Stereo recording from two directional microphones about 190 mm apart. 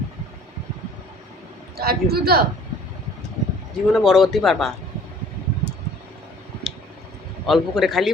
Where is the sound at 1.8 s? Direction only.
55° right (ahead or behind).